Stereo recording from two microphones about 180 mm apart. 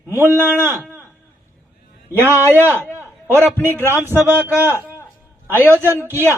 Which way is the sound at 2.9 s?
10° right (ahead or behind).